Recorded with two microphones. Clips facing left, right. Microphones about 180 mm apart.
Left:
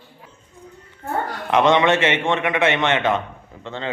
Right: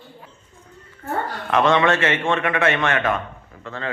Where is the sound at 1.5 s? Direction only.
20° left (ahead or behind).